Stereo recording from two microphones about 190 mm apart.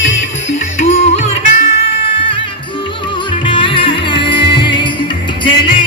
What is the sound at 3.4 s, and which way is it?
Music, 25° left (ahead or behind).